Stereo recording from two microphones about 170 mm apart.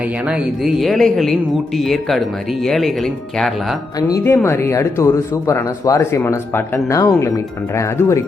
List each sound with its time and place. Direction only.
0.0 s speech: 5° right (ahead or behind)
3.9 s speech: 15° left (ahead or behind)